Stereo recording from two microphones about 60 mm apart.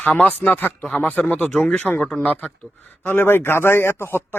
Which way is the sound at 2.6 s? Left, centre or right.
Left.